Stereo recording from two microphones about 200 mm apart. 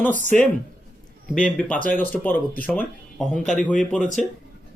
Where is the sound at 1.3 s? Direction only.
5° left (ahead or behind).